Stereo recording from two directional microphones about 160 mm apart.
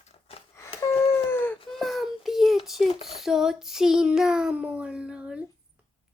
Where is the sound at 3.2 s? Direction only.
Centre (ahead or behind).